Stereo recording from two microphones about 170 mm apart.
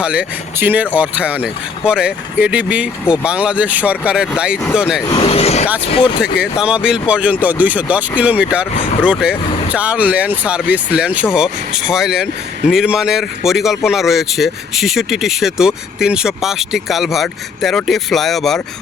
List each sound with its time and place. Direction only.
0.0 s speech: 5° right (ahead or behind)
5.0 s speech: 30° left (ahead or behind)
6.4 s speech: 5° right (ahead or behind)